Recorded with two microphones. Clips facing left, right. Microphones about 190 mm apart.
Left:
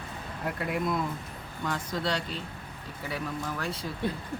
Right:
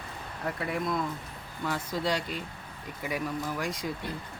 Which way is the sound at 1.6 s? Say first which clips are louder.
Right 1 dB; 10° right (ahead or behind).